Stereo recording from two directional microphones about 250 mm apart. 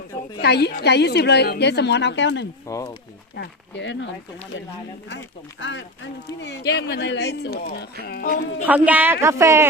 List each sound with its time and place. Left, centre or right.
0.4 s speech: left
2.6 s speech: centre
3.3 s speech: left
8.6 s speech: centre